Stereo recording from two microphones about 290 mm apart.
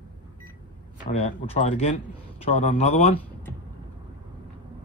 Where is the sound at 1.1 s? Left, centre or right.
Left.